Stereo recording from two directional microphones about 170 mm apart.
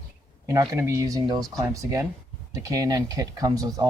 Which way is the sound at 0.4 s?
20° right (ahead or behind).